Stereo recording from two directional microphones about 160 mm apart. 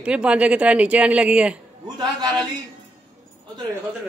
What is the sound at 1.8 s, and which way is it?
Speech, 25° right (ahead or behind).